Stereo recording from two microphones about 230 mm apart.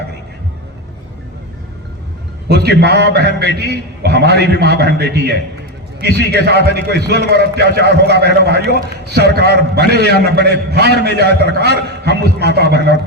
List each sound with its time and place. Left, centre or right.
2.5 s a man's voice: right